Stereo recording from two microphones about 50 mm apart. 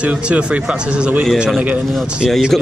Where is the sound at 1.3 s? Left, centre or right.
Centre.